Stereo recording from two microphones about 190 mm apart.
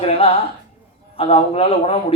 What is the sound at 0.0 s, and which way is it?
Speech, 30° left (ahead or behind).